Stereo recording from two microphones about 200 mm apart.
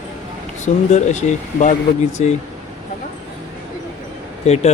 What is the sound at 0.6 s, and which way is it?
Speech, 35° left (ahead or behind).